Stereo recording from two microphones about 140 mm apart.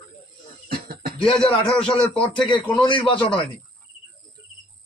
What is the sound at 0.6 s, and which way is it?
Cough, 90° right.